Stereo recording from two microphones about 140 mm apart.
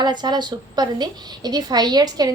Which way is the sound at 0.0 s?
30° right (ahead or behind).